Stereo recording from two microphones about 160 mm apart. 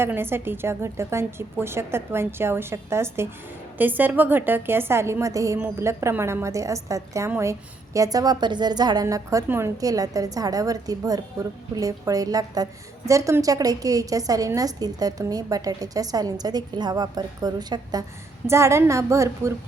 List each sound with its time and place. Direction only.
0.0 s a woman's voice: 15° right (ahead or behind)